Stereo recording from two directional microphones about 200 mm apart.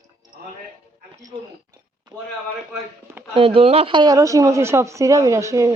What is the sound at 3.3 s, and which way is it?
A woman's voice, 25° right (ahead or behind).